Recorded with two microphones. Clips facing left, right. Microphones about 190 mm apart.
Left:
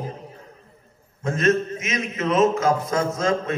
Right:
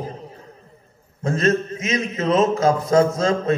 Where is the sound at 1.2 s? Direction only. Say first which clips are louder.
Right 1 dB; 35° right (ahead or behind).